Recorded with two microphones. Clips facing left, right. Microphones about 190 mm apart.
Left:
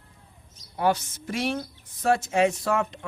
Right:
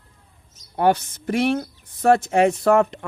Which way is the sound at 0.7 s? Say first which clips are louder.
Right 5 dB; 60° right (ahead or behind).